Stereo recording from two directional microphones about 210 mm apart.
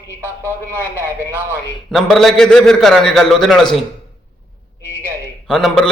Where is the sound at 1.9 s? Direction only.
Centre (ahead or behind).